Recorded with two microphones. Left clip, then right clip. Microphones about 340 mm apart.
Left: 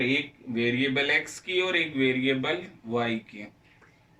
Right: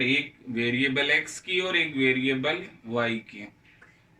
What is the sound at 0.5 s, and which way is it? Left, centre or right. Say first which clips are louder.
Speech: right 1 dB; centre.